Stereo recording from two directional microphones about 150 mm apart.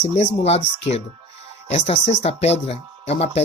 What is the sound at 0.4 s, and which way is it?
Speech, 45° left (ahead or behind).